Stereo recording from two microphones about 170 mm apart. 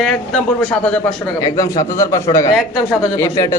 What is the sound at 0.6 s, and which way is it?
Speech, 5° left (ahead or behind).